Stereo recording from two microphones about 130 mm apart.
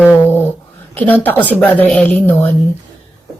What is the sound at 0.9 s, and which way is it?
Speech, 15° left (ahead or behind).